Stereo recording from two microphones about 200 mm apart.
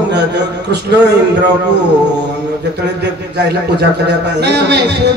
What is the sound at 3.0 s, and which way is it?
Speech, 55° right (ahead or behind).